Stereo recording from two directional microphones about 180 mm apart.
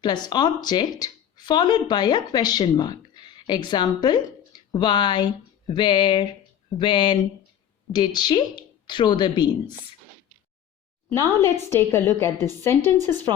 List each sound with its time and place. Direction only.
0.0 s speech: 25° left (ahead or behind)
11.1 s a woman's voice: 15° left (ahead or behind)